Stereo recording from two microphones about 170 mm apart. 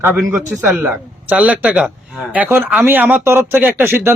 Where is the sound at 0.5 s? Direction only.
5° right (ahead or behind).